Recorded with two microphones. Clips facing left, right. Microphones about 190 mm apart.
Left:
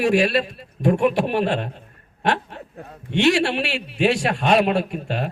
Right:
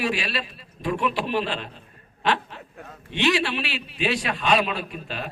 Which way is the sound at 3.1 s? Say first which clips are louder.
Left 5 dB; 50° left (ahead or behind).